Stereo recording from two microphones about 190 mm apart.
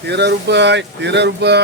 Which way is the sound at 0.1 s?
60° right (ahead or behind).